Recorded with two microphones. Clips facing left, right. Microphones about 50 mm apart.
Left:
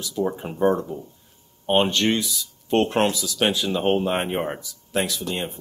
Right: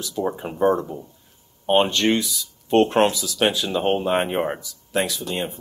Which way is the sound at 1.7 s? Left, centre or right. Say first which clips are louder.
Right 2 dB; right.